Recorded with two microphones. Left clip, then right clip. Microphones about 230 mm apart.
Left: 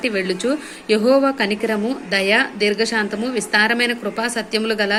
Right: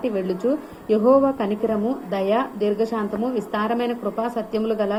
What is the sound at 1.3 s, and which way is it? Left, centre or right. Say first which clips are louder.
A woman's voice: left 3 dB; centre.